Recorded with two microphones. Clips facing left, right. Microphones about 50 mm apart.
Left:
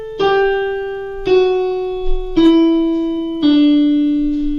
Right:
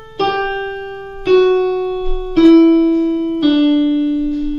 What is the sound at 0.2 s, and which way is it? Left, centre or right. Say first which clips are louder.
Piano: left 3 dB; centre.